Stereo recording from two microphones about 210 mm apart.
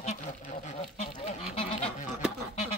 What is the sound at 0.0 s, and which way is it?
Duck, 35° left (ahead or behind).